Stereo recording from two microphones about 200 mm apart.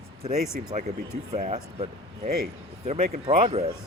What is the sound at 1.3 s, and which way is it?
Speech, 35° right (ahead or behind).